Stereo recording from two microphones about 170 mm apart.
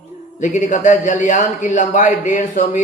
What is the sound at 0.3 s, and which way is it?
A man's voice, 45° left (ahead or behind).